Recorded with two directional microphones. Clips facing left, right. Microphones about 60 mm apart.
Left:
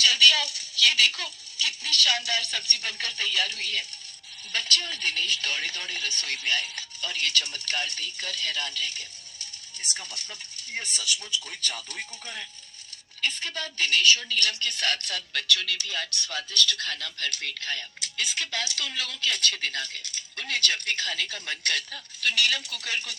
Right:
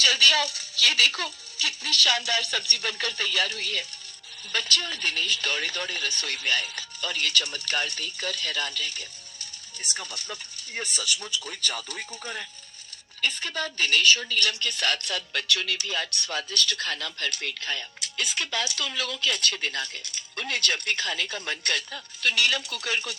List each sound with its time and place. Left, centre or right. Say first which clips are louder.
0.0 s speech: even; right